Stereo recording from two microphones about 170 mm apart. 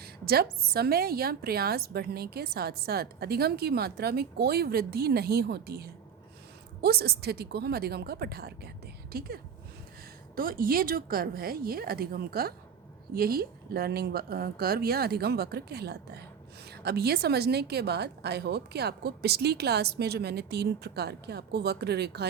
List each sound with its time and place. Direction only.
0.0 s a woman's voice: 65° right (ahead or behind)